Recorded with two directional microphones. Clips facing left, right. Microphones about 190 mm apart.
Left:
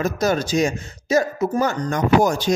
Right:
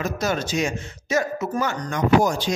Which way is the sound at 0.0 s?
40° left (ahead or behind).